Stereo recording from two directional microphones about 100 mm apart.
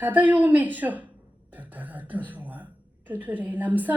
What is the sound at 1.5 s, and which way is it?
Beatboxing, 15° right (ahead or behind).